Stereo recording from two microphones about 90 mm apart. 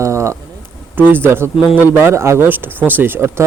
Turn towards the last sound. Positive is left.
turn(degrees=-30)  # may be behind; listen again after turning